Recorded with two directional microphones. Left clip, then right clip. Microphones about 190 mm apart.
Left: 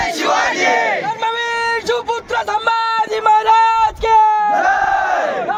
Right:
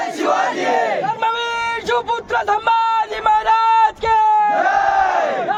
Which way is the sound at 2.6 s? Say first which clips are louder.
Even; 35° left (ahead or behind).